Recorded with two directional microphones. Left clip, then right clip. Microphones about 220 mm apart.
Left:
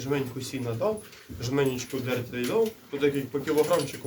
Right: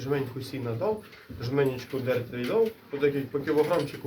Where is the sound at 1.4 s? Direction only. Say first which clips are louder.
Even; 10° left (ahead or behind).